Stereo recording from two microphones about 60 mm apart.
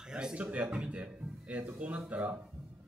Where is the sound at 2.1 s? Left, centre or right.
Right.